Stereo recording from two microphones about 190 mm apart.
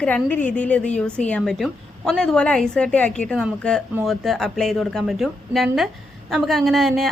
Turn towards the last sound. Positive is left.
turn(degrees=0)  # may be behind; listen again after turning